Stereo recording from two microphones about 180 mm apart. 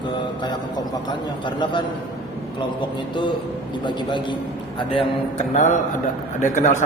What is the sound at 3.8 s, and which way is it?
Speech, 25° left (ahead or behind).